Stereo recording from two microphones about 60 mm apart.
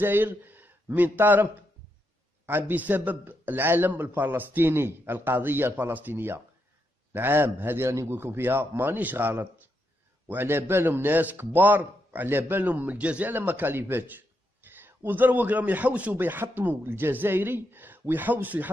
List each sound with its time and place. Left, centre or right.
0.0 s a man's voice: right
13.3 s a man's voice: right
16.2 s a man's voice: right